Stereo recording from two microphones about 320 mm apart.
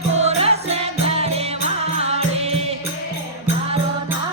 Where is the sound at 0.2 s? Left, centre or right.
Centre.